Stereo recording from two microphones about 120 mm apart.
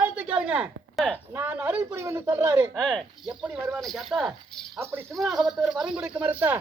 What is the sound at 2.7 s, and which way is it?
Speech, 5° left (ahead or behind).